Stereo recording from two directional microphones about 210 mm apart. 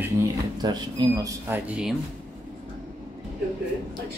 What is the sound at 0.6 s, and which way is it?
Speech, 20° right (ahead or behind).